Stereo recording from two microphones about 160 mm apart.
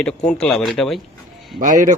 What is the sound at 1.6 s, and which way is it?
Speech, 55° right (ahead or behind).